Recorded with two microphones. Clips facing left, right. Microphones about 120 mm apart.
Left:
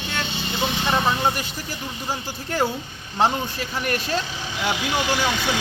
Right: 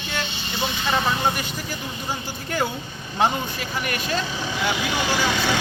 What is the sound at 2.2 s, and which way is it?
Speech, 30° left (ahead or behind).